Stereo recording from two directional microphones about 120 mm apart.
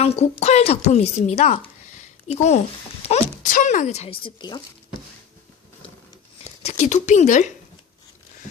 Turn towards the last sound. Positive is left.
turn(degrees=85)